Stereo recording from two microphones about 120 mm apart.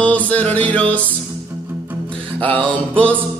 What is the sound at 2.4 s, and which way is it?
Music, 45° right (ahead or behind).